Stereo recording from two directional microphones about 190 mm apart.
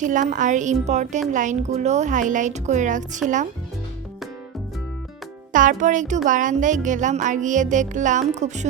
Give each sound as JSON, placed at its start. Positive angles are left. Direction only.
{"t": 0.0, "sound": "music", "side_deg": -40}
{"t": 5.5, "sound": "a child's voice", "side_deg": -45}
{"t": 6.2, "sound": "music", "side_deg": -40}